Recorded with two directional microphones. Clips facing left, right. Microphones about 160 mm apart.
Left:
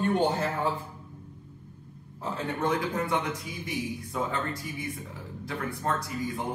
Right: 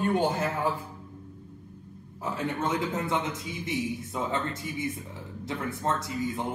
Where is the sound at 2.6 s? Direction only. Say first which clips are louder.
Left 3 dB; 25° right (ahead or behind).